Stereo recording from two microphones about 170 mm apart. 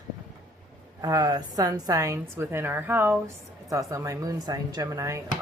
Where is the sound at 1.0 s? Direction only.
20° right (ahead or behind).